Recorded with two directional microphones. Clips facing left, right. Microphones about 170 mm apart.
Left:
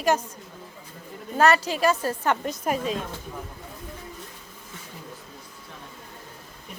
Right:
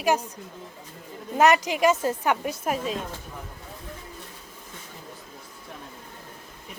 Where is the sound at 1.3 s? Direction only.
15° right (ahead or behind).